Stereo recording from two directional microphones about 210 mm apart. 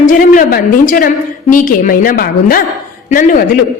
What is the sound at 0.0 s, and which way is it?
A woman's voice, 40° left (ahead or behind).